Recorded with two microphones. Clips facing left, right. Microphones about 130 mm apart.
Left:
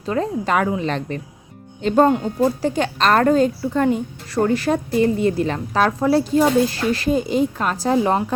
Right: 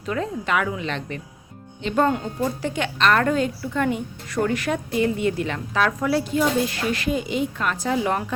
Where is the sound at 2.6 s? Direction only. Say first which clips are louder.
Left 4 dB; 35° left (ahead or behind).